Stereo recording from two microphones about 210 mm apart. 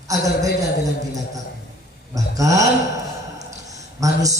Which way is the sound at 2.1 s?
15° right (ahead or behind).